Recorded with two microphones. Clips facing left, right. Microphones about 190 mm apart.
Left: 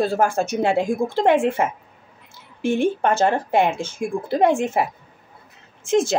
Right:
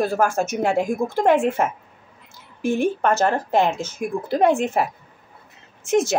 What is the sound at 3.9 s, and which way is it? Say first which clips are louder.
Speech: even; 10° left (ahead or behind).